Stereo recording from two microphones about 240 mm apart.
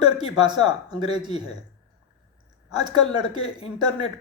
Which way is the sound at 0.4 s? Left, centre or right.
Centre.